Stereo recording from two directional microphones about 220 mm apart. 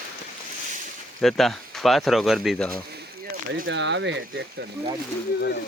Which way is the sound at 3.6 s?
55° right (ahead or behind).